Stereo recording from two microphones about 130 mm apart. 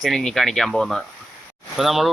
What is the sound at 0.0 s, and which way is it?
Speech, 5° left (ahead or behind).